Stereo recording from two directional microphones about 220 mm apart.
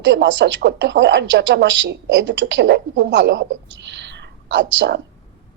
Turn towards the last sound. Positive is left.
turn(degrees=-55)  # may be behind; listen again after turning